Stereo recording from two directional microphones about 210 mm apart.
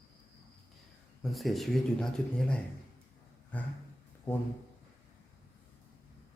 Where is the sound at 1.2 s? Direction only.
Centre (ahead or behind).